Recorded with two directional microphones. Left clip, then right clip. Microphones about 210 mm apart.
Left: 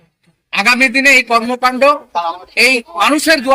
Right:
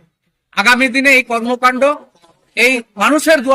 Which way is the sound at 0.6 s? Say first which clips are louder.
Left 1 dB; 15° right (ahead or behind).